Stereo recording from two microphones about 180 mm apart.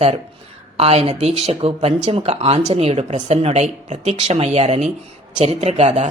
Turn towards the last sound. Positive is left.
turn(degrees=-40)  # may be behind; listen again after turning